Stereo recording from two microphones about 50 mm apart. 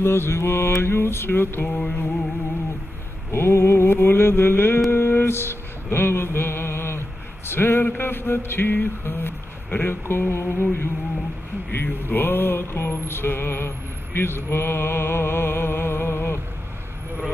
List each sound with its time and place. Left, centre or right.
0.0 s mantra: left
3.3 s mantra: left
11.7 s mantra: left